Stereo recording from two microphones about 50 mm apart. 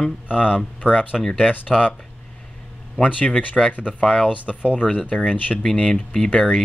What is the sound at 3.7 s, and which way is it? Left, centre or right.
Speech, left.